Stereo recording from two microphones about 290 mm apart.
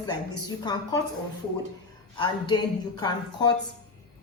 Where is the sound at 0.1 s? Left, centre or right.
Centre.